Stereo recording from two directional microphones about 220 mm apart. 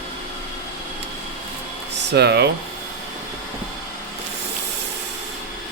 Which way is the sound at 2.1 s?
50° right (ahead or behind).